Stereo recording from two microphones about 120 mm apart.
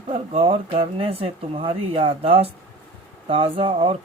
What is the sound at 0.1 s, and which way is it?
Speech, 50° right (ahead or behind).